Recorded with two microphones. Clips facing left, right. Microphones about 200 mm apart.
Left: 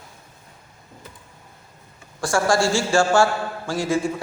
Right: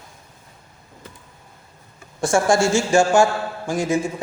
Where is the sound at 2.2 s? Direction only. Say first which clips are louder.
Right 2 dB; 20° right (ahead or behind).